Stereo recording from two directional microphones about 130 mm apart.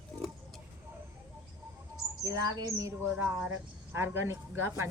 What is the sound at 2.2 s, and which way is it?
Speech, 25° right (ahead or behind).